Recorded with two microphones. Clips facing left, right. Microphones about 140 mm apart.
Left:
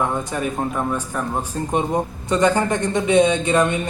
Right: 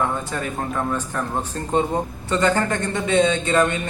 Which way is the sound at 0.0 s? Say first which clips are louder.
Left 2 dB; 15° left (ahead or behind).